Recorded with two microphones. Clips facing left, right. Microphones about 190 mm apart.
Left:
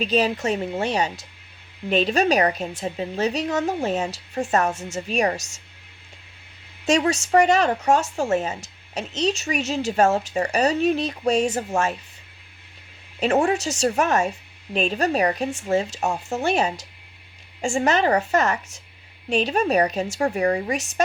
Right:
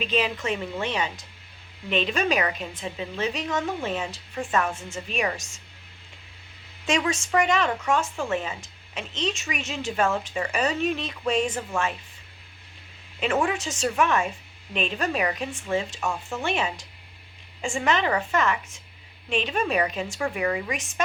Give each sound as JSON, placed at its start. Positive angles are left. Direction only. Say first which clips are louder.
{"t": 0.0, "sound": "speech", "louder": "left 5 dB", "side_deg": 40}
{"t": 4.7, "sound": "a woman's voice", "louder": "left 4 dB", "side_deg": 80}
{"t": 4.9, "sound": "speech", "louder": "left 6 dB", "side_deg": 40}
{"t": 6.8, "sound": "speech", "louder": "left 5 dB", "side_deg": 40}
{"t": 13.1, "sound": "speech", "louder": "left 5 dB", "side_deg": 40}
{"t": 17.7, "sound": "speech", "louder": "left 4 dB", "side_deg": 40}